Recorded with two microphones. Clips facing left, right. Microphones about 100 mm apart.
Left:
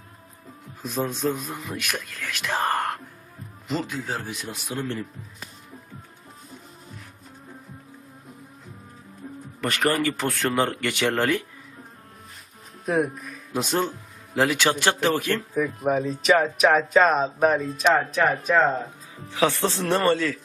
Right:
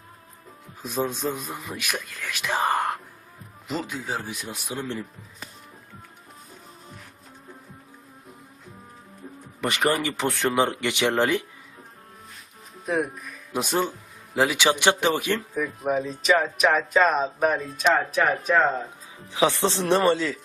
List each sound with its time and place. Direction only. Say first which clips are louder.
0.8 s speech: even; 5° right (ahead or behind)
9.6 s speech: even; 10° right (ahead or behind)
12.8 s speech: left 2 dB; centre (ahead or behind)
14.3 s speech: even; 5° right (ahead or behind)
19.3 s speech: right 1 dB; 15° right (ahead or behind)